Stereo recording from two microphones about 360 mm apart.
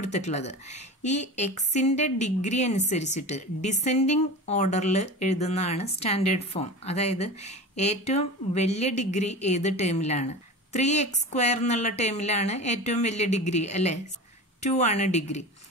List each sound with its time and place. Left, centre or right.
0.0 s a woman's voice: centre